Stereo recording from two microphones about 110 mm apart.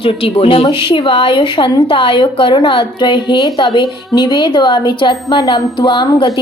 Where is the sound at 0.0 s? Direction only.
60° left (ahead or behind).